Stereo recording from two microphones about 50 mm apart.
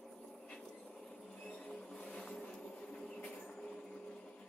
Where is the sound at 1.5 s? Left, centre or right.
Centre.